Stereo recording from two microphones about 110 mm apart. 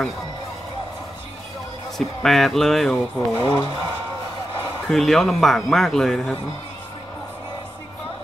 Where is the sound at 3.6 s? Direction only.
55° right (ahead or behind).